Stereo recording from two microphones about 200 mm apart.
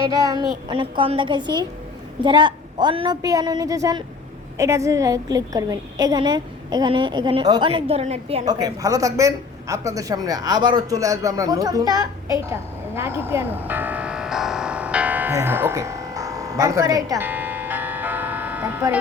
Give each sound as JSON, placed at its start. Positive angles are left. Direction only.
{"t": 0.0, "sound": "a woman's voice", "side_deg": -20}